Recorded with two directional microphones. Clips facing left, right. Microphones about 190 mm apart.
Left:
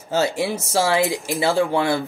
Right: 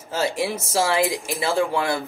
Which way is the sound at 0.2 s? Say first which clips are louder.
Left 1 dB; 30° left (ahead or behind).